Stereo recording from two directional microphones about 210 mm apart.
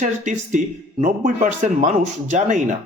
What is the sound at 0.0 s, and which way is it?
Speech, 35° right (ahead or behind).